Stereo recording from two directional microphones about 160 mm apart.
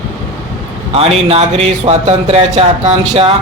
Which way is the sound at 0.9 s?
40° right (ahead or behind).